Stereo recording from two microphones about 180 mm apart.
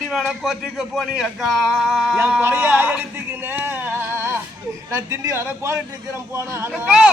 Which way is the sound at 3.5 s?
10° right (ahead or behind).